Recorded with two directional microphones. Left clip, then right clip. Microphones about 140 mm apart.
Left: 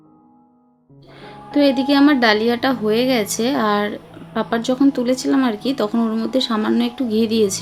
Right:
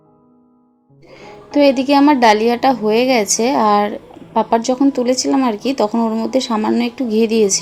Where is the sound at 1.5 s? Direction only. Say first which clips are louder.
Right 4 dB; 10° right (ahead or behind).